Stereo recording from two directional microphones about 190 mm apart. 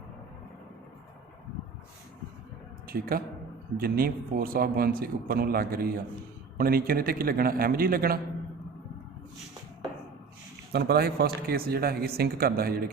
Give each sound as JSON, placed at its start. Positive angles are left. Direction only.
{"t": 2.8, "sound": "speech", "side_deg": -50}
{"t": 10.7, "sound": "speech", "side_deg": -55}